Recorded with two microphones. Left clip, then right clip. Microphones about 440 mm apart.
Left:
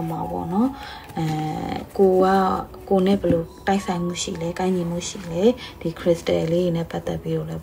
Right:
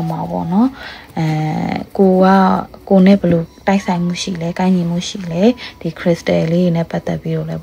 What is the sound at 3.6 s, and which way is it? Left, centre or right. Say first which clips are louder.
Speech: right 6 dB; centre.